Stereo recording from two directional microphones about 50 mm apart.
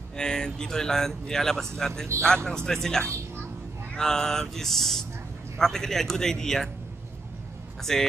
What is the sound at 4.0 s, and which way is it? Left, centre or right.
Speech, centre.